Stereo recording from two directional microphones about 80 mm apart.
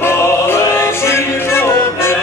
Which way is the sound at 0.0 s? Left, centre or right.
Left.